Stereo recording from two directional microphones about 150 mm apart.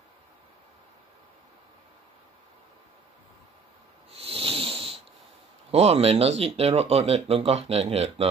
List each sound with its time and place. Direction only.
4.1 s snake: 40° right (ahead or behind)
5.7 s speech: 45° right (ahead or behind)